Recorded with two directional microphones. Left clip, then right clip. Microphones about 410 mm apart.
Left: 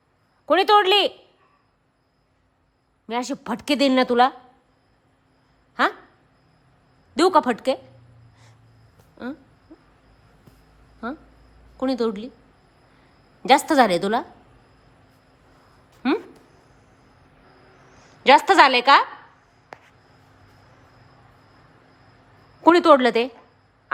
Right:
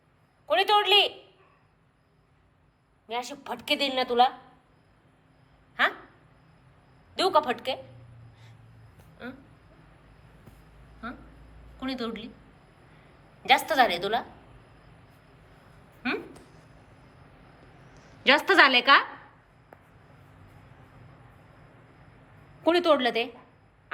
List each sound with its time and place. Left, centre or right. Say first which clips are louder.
0.4 s speech: left 6 dB; centre
3.1 s speech: left 6 dB; centre
7.2 s a woman's voice: left 6 dB; centre
11.8 s a woman's voice: left 10 dB; centre
13.4 s a woman's voice: left 5 dB; centre
18.2 s a woman's voice: left 6 dB; centre
22.6 s a woman's voice: left 8 dB; centre